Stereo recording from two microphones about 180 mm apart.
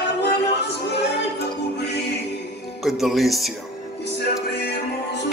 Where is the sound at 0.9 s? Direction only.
70° left (ahead or behind).